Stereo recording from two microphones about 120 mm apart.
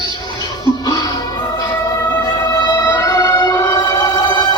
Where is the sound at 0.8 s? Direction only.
35° left (ahead or behind).